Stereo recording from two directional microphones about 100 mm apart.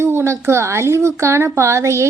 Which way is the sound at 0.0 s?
25° right (ahead or behind).